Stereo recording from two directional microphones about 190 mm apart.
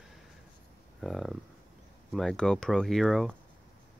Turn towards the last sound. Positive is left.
turn(degrees=0)  # may be behind; listen again after turning